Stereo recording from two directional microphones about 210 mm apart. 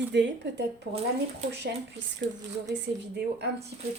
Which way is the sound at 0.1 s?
55° right (ahead or behind).